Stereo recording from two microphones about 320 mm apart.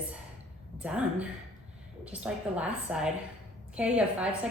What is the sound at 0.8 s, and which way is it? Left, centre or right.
A woman's voice, centre.